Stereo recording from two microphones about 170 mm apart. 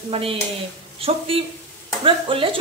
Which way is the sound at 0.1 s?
35° right (ahead or behind).